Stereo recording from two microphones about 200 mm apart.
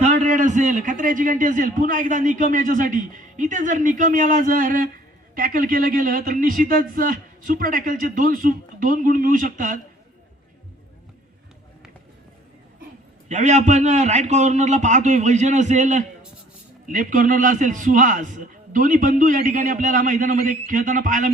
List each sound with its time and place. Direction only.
0.0 s a man's voice: 40° right (ahead or behind)
13.2 s a man's voice: 35° right (ahead or behind)